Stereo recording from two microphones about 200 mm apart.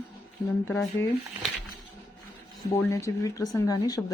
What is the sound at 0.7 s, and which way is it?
Speech, 5° left (ahead or behind).